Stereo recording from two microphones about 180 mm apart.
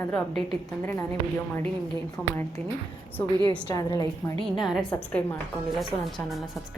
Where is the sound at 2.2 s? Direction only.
Centre (ahead or behind).